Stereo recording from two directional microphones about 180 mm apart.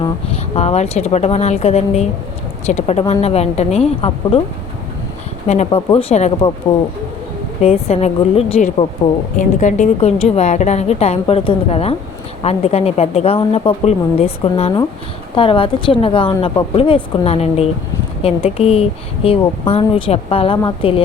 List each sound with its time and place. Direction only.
0.0 s speech: 35° left (ahead or behind)
5.5 s speech: 35° left (ahead or behind)
7.6 s a woman's voice: 35° left (ahead or behind)